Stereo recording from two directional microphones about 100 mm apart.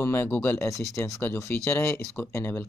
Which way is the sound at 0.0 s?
20° left (ahead or behind).